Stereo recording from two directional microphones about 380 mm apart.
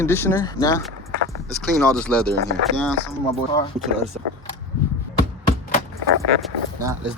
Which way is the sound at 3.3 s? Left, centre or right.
Centre.